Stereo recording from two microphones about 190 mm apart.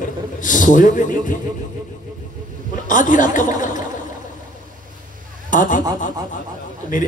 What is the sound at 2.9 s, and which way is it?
Speech, 45° left (ahead or behind).